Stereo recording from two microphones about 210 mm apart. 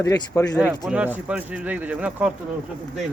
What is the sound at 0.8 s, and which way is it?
A man's voice, 5° right (ahead or behind).